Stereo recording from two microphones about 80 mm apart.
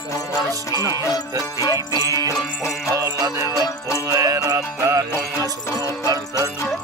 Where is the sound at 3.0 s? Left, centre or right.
Right.